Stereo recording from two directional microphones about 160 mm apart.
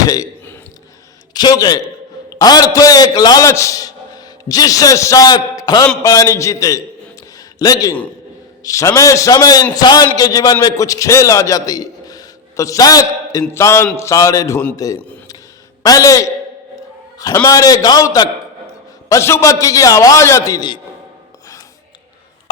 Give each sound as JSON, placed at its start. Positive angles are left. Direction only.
{"t": 0.0, "sound": "a sound", "side_deg": 20}
{"t": 1.3, "sound": "a man's voice", "side_deg": 25}
{"t": 13.5, "sound": "music", "side_deg": 15}
{"t": 15.8, "sound": "a man's voice", "side_deg": 20}